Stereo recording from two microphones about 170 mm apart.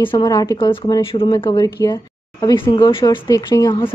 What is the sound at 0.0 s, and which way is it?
A woman's voice, 30° left (ahead or behind).